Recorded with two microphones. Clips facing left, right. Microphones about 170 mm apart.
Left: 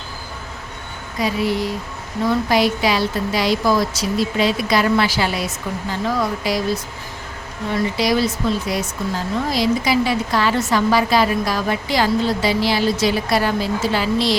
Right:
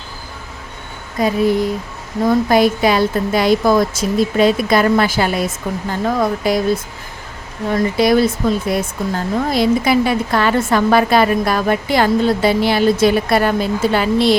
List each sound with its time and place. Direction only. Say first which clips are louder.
1.2 s speech: right 5 dB; 50° right (ahead or behind)
7.7 s speech: right 5 dB; 50° right (ahead or behind)